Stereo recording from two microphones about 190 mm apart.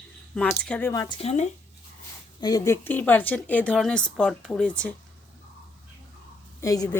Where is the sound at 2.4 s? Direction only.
20° left (ahead or behind).